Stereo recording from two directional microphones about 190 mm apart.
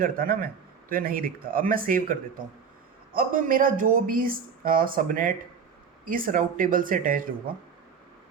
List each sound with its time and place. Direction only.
0.0 s speech: 50° right (ahead or behind)
3.2 s speech: 45° right (ahead or behind)